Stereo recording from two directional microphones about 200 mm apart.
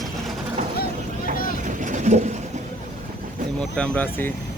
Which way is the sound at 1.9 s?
35° right (ahead or behind).